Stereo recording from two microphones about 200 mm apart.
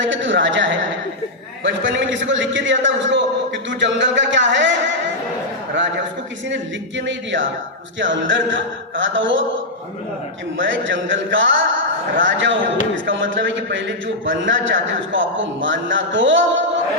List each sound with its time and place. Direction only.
0.0 s a man's voice: 70° right (ahead or behind)
5.7 s a sound: 65° right (ahead or behind)
7.9 s a man's voice: 70° right (ahead or behind)
10.6 s a man's voice: 70° right (ahead or behind)